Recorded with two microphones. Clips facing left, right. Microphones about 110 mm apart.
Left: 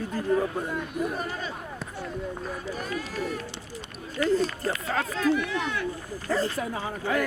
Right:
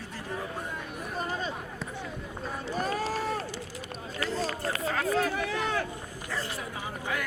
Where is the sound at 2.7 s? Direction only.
30° right (ahead or behind).